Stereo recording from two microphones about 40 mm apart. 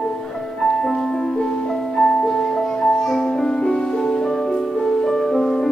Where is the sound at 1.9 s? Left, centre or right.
Centre.